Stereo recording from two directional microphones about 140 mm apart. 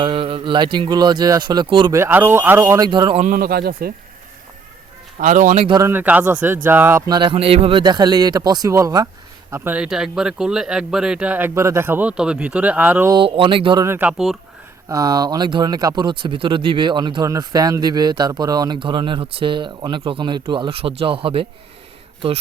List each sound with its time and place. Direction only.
0.0 s speech: 35° right (ahead or behind)
1.9 s a man's voice: 15° right (ahead or behind); by 3.2 s 30° right (ahead or behind)
3.2 s speech: 85° right
5.2 s a man's voice: 65° right (ahead or behind)
5.8 s speech: 15° right (ahead or behind)
7.1 s a man's voice: 35° right (ahead or behind)
9.5 s speech: 15° right (ahead or behind)
13.1 s speech: 40° right (ahead or behind)
13.8 s speech: 15° right (ahead or behind)
14.1 s speech: 5° right (ahead or behind)
14.8 s speech: 25° right (ahead or behind)